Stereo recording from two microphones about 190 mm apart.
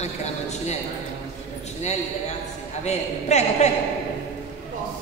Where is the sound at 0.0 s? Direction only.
35° left (ahead or behind).